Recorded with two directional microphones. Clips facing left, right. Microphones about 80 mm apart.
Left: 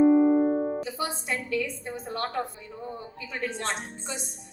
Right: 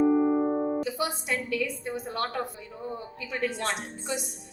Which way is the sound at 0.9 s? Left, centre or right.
Left.